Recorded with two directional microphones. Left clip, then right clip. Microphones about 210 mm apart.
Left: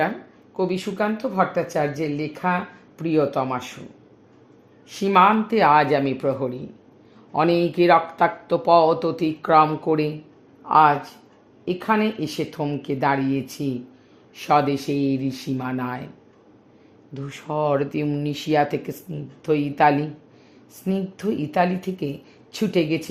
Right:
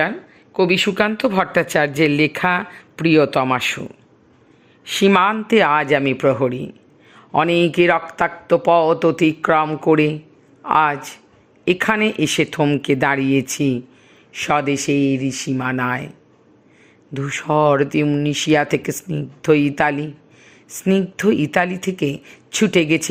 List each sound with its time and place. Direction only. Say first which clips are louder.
0.5 s speech: right 9 dB; 30° right (ahead or behind)
4.9 s speech: right 1 dB; 30° right (ahead or behind)
17.2 s speech: right 8 dB; 25° right (ahead or behind)